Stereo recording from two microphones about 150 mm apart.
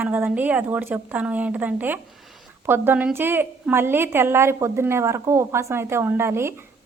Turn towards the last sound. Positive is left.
turn(degrees=-15)  # may be behind; listen again after turning